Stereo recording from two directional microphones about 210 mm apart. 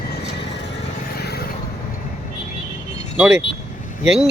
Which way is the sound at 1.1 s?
50° left (ahead or behind).